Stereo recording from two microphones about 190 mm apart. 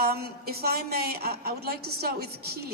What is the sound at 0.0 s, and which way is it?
A woman's voice, 55° right (ahead or behind).